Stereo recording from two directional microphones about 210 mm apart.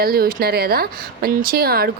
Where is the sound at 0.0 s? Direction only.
45° right (ahead or behind).